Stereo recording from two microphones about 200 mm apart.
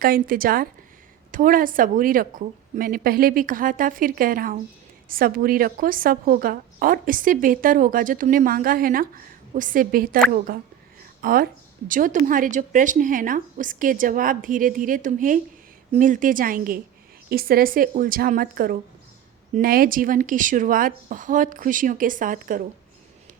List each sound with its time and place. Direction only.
0.0 s a woman's voice: 45° right (ahead or behind)